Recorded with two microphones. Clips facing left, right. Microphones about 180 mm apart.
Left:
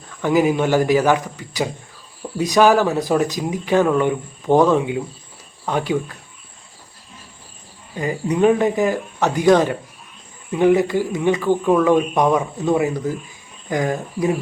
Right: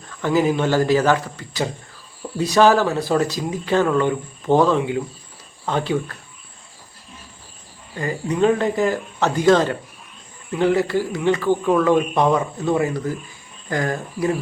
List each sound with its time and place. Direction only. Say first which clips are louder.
0.2 s speech: left 2 dB; 15° left (ahead or behind)
7.9 s speech: left 2 dB; 15° left (ahead or behind)